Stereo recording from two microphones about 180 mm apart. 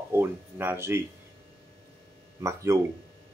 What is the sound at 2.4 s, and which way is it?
Speech, 15° right (ahead or behind).